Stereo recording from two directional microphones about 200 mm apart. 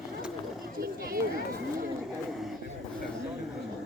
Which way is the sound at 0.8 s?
45° right (ahead or behind).